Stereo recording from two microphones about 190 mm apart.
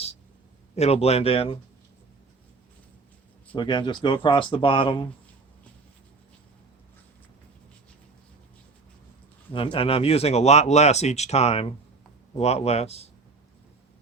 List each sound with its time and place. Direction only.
0.8 s speech: 35° left (ahead or behind)
3.5 s speech: 25° left (ahead or behind)
9.5 s speech: 25° left (ahead or behind)